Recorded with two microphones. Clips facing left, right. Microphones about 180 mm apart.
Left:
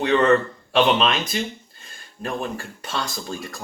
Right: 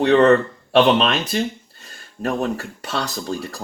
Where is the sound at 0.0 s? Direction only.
35° right (ahead or behind).